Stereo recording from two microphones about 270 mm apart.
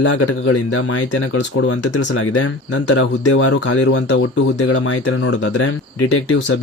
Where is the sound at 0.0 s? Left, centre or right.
Left.